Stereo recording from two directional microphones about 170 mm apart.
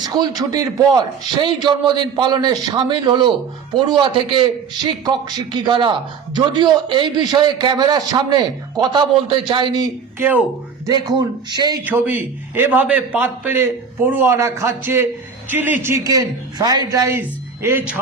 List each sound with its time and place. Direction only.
0.0 s a man's voice: 25° right (ahead or behind)
5.5 s a man's voice: 30° right (ahead or behind)
11.9 s a man's voice: 10° right (ahead or behind)